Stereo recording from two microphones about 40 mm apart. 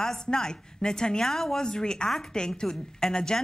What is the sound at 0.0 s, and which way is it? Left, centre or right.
A woman's voice, centre.